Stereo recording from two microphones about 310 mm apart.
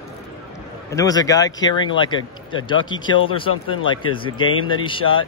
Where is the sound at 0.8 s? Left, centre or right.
Centre.